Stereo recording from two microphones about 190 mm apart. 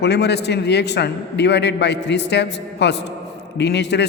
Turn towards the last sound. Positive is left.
turn(degrees=65)  # may be behind; listen again after turning